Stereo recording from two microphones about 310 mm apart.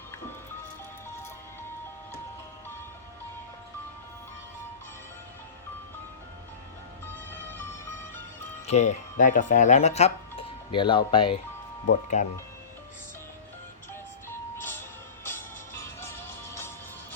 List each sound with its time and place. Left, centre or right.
7.0 s music: centre
8.6 s speech: left
14.3 s music: centre